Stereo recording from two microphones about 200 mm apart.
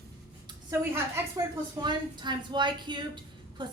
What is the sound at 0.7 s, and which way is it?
A woman's voice, 10° right (ahead or behind).